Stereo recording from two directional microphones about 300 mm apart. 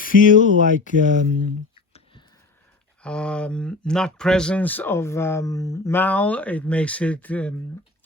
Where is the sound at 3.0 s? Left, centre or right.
Centre.